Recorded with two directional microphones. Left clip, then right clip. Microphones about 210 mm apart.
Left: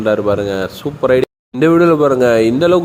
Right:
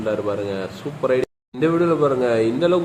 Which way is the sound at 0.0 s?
40° left (ahead or behind).